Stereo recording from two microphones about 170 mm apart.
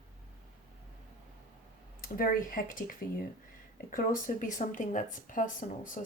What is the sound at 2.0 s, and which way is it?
Speech, 55° left (ahead or behind).